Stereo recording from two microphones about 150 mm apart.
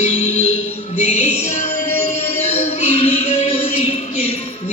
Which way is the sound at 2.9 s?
40° left (ahead or behind).